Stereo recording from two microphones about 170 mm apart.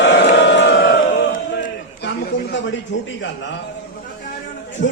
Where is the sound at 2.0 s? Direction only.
85° left.